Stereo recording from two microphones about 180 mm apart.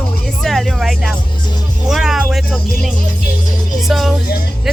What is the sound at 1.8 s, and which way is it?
Speech, centre (ahead or behind).